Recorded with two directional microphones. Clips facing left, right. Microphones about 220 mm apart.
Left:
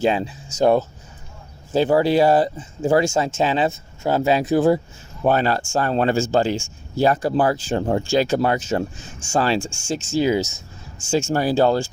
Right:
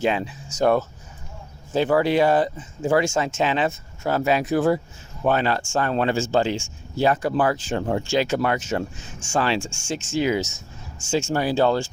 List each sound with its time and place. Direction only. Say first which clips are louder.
0.0 s speech: left 3 dB; 35° left (ahead or behind)